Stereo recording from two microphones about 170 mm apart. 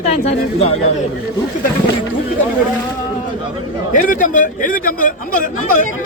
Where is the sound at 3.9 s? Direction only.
50° left (ahead or behind).